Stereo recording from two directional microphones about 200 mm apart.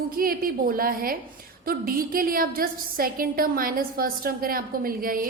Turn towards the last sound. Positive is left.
turn(degrees=-45)  # may be behind; listen again after turning